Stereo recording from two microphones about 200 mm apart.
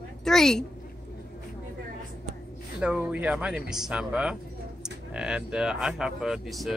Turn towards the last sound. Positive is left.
turn(degrees=0)  # may be behind; listen again after turning